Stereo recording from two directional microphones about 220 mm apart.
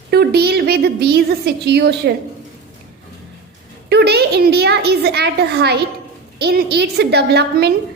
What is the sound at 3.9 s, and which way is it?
A woman's voice, 50° right (ahead or behind).